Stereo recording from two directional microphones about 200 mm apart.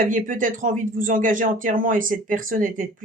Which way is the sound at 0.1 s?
40° right (ahead or behind).